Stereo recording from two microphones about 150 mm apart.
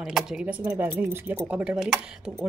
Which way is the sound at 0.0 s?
5° right (ahead or behind).